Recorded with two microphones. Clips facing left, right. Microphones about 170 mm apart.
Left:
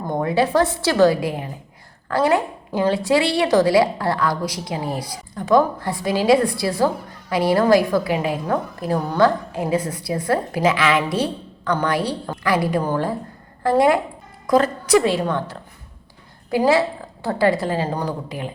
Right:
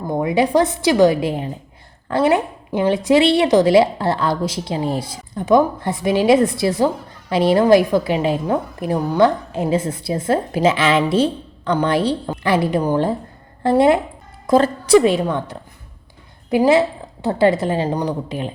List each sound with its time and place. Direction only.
0.1 s a woman's voice: 15° right (ahead or behind)